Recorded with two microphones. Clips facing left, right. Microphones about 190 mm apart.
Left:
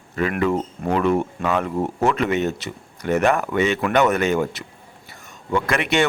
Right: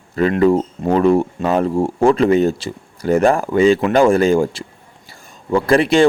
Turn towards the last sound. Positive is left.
turn(degrees=-30)  # may be behind; listen again after turning